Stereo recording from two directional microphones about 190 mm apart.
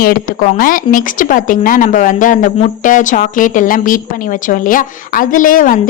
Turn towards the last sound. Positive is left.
turn(degrees=45)  # may be behind; listen again after turning